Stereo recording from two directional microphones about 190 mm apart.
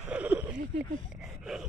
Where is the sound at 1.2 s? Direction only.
Centre (ahead or behind).